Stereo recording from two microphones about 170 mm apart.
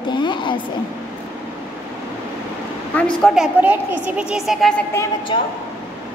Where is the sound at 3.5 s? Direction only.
10° right (ahead or behind).